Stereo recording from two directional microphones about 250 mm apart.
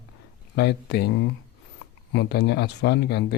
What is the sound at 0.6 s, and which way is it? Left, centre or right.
Speech, left.